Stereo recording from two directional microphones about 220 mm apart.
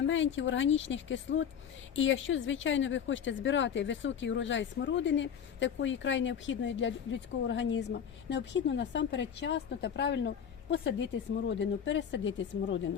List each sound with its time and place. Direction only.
0.1 s speech: 60° left (ahead or behind)